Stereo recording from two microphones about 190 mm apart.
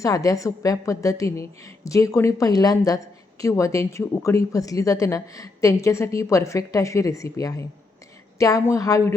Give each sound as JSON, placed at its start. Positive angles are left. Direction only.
{"t": 0.0, "sound": "speech", "side_deg": 15}